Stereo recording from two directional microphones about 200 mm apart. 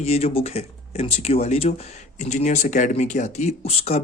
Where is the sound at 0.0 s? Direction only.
30° left (ahead or behind).